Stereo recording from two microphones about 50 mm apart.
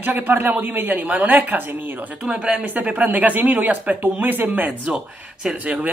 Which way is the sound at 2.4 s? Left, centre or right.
Right.